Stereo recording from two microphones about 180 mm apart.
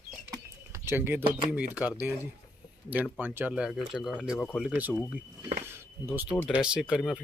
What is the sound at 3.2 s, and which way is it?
Speech, 10° right (ahead or behind).